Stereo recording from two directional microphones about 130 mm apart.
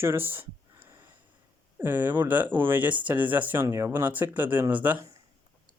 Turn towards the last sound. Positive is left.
turn(degrees=-15)  # may be behind; listen again after turning